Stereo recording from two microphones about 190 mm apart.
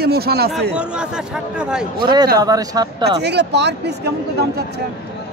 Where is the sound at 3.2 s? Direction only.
65° right (ahead or behind).